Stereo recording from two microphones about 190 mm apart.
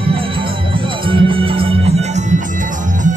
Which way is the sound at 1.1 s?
30° right (ahead or behind).